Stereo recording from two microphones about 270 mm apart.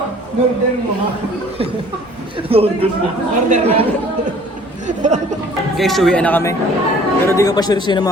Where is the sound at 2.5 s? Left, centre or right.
Right.